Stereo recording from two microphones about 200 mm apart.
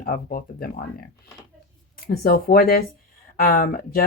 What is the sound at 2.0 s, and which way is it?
Speech, 50° left (ahead or behind).